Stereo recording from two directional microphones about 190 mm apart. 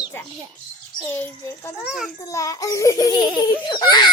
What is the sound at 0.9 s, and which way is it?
Speech, 10° left (ahead or behind).